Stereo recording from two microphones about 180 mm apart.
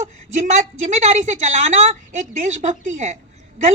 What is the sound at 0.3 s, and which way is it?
A woman's voice, 40° right (ahead or behind).